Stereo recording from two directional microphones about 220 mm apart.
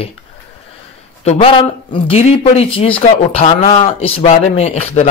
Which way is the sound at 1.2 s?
25° left (ahead or behind).